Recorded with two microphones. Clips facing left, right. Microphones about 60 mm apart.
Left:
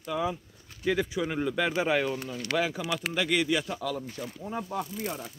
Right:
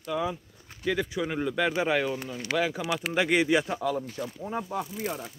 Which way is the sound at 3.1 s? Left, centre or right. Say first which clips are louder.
Right 4 dB; right.